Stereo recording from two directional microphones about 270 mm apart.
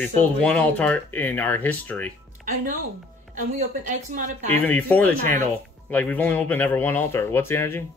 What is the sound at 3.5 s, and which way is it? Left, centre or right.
Speech, right.